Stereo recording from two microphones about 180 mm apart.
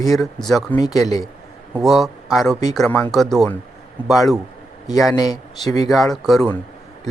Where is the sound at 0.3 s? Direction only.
Centre (ahead or behind).